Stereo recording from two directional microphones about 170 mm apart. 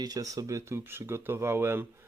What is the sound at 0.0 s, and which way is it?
Speech, 20° right (ahead or behind).